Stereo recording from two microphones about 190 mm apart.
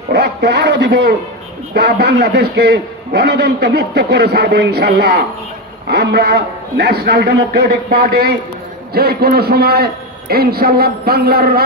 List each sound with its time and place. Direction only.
0.1 s a man's voice: 60° right (ahead or behind)
8.9 s a man's voice: 55° right (ahead or behind)